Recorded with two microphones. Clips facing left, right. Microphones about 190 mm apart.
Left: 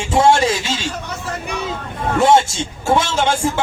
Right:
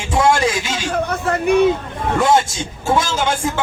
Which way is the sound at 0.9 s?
55° right (ahead or behind).